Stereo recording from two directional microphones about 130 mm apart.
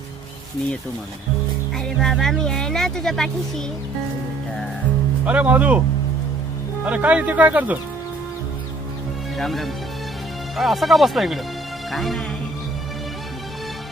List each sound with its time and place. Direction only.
1.7 s speech: 5° left (ahead or behind)
5.2 s speech: 10° right (ahead or behind)
6.8 s speech: 10° right (ahead or behind)
9.4 s speech: centre (ahead or behind)